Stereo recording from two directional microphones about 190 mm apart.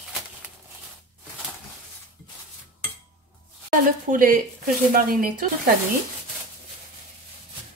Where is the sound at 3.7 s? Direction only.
45° right (ahead or behind).